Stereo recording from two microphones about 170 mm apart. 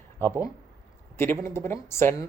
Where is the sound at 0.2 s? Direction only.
15° left (ahead or behind).